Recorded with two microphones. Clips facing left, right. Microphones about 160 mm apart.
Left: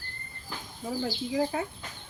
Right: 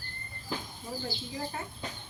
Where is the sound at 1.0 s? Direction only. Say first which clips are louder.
Left 11 dB; 90° left.